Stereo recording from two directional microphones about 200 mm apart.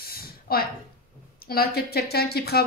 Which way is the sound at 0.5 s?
50° left (ahead or behind).